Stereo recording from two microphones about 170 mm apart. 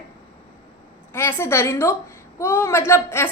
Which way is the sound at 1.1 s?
15° left (ahead or behind).